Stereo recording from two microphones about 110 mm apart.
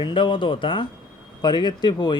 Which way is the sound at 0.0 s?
50° left (ahead or behind).